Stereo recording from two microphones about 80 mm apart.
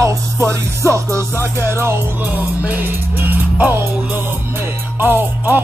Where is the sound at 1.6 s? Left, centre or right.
Right.